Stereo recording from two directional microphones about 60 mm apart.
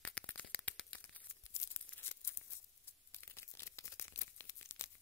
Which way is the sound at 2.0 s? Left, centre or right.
Left.